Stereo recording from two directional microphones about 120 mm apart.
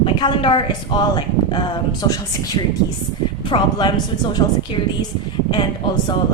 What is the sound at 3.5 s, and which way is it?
Speech, 45° left (ahead or behind).